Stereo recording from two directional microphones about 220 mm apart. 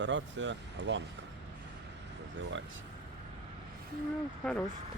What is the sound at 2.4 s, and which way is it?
Speech, 60° right (ahead or behind).